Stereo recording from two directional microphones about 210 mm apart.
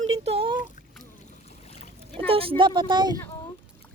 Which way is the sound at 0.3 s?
25° right (ahead or behind).